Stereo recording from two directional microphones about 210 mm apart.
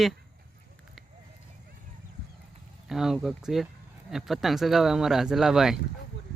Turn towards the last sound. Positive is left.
turn(degrees=0)  # may be behind; listen again after turning